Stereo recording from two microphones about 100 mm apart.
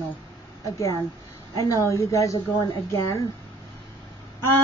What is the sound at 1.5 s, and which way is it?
A woman's voice, 30° left (ahead or behind).